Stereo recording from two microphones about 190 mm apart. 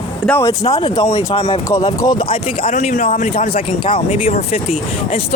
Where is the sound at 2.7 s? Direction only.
40° left (ahead or behind).